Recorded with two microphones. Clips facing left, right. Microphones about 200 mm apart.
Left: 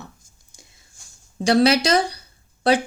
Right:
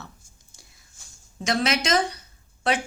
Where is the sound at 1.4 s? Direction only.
35° left (ahead or behind).